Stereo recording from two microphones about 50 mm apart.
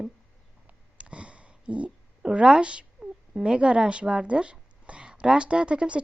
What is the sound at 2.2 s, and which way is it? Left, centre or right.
Speech, centre.